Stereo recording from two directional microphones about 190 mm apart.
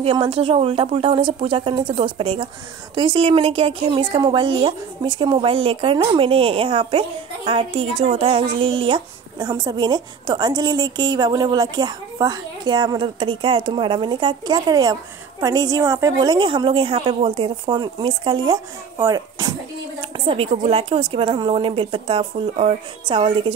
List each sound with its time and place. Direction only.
0.0 s a woman's voice: 30° right (ahead or behind)
20.0 s a woman's voice: 30° right (ahead or behind)